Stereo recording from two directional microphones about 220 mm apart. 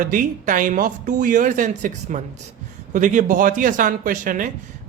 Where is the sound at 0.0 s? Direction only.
40° right (ahead or behind).